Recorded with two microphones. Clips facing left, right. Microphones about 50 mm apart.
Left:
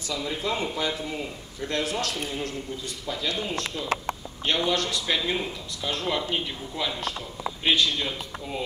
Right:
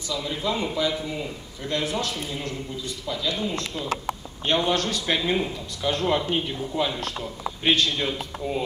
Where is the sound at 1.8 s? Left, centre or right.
Right.